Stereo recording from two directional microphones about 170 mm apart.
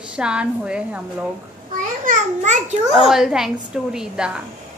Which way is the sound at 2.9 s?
Centre (ahead or behind).